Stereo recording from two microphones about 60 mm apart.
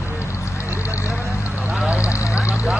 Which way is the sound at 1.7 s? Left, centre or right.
Right.